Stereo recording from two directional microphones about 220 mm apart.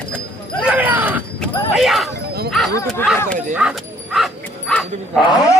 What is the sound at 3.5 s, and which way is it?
Bow-wow, 5° right (ahead or behind).